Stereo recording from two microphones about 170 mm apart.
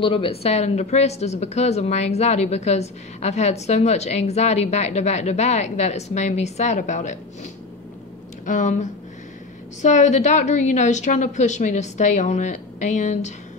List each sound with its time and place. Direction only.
0.0 s speech: 30° left (ahead or behind)
8.5 s a woman's voice: 45° left (ahead or behind)